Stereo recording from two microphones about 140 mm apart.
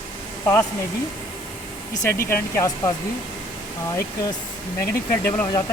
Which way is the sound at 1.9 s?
20° left (ahead or behind).